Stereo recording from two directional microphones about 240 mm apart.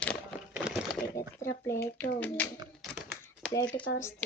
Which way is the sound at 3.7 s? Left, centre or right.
Centre.